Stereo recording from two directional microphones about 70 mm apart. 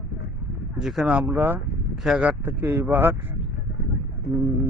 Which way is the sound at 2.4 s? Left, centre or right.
Right.